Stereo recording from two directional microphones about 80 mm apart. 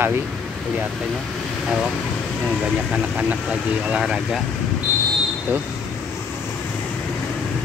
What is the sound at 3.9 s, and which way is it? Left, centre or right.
Speech, centre.